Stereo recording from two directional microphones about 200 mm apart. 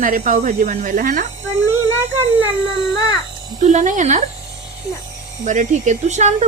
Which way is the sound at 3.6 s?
35° right (ahead or behind).